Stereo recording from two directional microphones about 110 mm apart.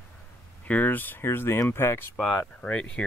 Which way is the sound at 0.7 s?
15° left (ahead or behind).